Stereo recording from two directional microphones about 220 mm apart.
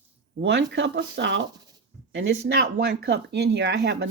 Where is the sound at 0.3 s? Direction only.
55° right (ahead or behind).